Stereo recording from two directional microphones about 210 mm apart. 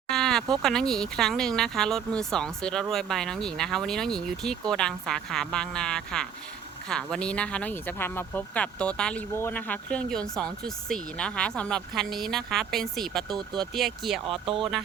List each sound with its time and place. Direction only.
0.1 s a sound: 5° left (ahead or behind)
0.6 s speech: centre (ahead or behind)
13.2 s speech: 20° right (ahead or behind)
13.7 s speech: centre (ahead or behind)
14.3 s speech: 25° right (ahead or behind)